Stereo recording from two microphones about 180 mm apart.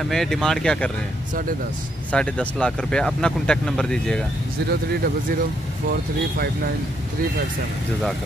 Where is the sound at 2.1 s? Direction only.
5° left (ahead or behind).